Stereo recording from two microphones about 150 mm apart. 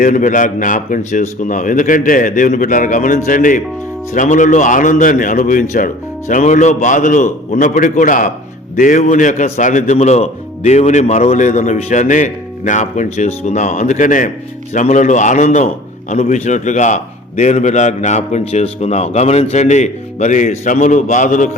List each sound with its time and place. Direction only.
0.0 s a man's voice: 60° left (ahead or behind)